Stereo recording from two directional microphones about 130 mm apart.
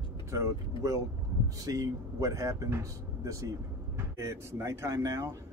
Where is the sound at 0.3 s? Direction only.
25° right (ahead or behind).